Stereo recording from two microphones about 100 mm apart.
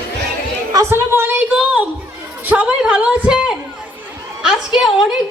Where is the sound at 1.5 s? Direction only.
10° right (ahead or behind).